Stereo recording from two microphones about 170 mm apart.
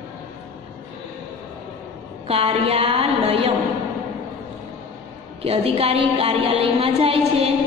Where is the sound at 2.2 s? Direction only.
35° right (ahead or behind).